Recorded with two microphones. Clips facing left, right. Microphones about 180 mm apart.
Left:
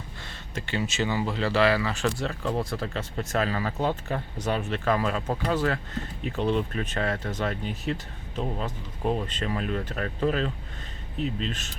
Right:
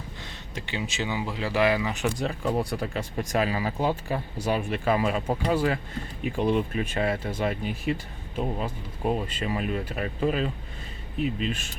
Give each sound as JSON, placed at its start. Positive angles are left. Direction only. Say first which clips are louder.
{"t": 0.5, "sound": "speech", "louder": "left 3 dB", "side_deg": -15}